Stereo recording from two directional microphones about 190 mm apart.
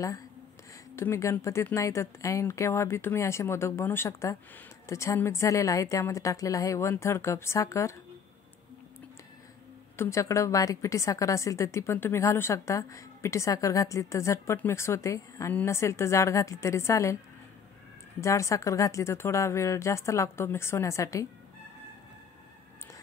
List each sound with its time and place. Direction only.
0.9 s a woman's voice: 15° left (ahead or behind)
9.9 s a woman's voice: 15° left (ahead or behind)
18.2 s a woman's voice: 15° left (ahead or behind)